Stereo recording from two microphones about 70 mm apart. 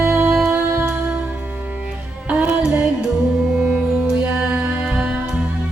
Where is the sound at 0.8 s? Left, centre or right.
Right.